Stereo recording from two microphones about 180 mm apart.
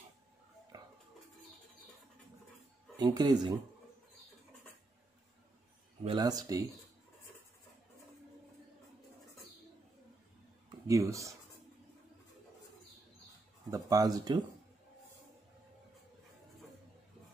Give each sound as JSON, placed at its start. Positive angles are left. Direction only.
{"t": 0.7, "sound": "dishes", "side_deg": -20}
{"t": 3.0, "sound": "speech", "side_deg": -25}
{"t": 6.0, "sound": "speech", "side_deg": -20}
{"t": 10.9, "sound": "speech", "side_deg": -15}
{"t": 13.7, "sound": "speech", "side_deg": -20}